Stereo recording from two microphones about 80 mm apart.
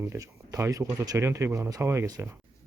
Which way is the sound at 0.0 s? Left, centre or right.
Right.